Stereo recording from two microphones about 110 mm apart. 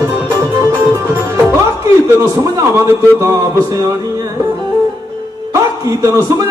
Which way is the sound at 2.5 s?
25° right (ahead or behind).